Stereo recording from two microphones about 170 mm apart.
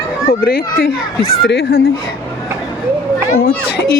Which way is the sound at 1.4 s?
80° left.